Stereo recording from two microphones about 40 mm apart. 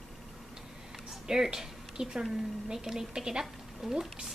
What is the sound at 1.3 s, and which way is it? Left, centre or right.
A woman's voice, centre.